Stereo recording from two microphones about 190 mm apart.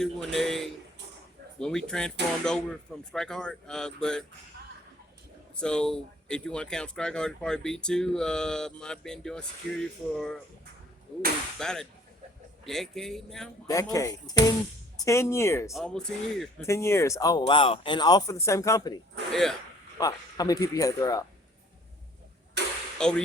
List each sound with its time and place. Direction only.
0.0 s speech: centre (ahead or behind)
5.5 s speech: 5° left (ahead or behind)
11.6 s speech: 5° left (ahead or behind)
13.7 s speech: 15° left (ahead or behind)
15.7 s speech: 5° left (ahead or behind)
16.6 s speech: 15° left (ahead or behind)
19.3 s speech: centre (ahead or behind)
20.0 s speech: 20° left (ahead or behind)
22.6 s a sound: 65° right (ahead or behind)
23.0 s speech: 5° left (ahead or behind)